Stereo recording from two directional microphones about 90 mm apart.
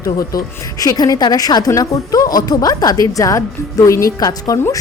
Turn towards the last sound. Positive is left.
turn(degrees=40)  # may be behind; listen again after turning